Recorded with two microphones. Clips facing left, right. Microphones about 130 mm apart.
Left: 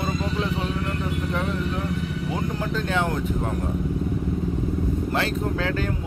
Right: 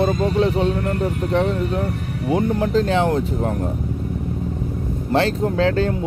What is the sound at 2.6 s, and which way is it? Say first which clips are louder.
Speech: right 7 dB; 35° right (ahead or behind).